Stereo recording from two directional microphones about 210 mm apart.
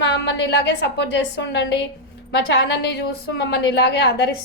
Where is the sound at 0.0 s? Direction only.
55° left (ahead or behind).